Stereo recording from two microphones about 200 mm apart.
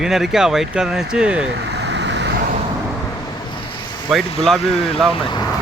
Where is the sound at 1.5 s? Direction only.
55° right (ahead or behind).